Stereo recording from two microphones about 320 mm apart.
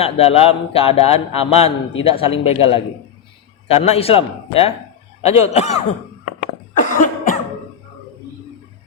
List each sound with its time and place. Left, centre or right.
0.0 s speech: centre
6.7 s cough: left